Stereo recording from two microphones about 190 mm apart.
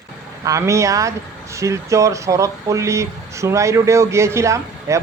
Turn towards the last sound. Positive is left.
turn(degrees=-15)  # may be behind; listen again after turning